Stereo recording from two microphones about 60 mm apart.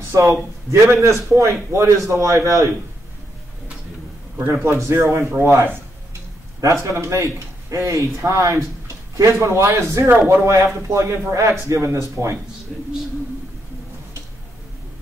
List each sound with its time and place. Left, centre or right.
0.1 s a man's voice: right
4.6 s a man's voice: right
5.0 s speech: right
6.6 s a man's voice: right